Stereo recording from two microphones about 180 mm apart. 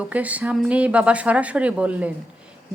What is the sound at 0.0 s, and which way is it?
A woman's voice, 10° right (ahead or behind).